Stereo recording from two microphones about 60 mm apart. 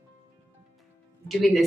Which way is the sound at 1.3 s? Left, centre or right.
Centre.